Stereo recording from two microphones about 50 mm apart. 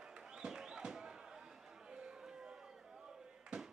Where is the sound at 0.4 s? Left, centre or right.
Centre.